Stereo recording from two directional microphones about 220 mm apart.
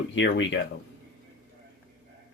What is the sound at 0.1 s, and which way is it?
Speech, 60° left (ahead or behind).